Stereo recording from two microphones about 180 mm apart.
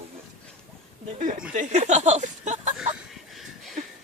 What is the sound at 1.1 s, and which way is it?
Speech, 45° right (ahead or behind).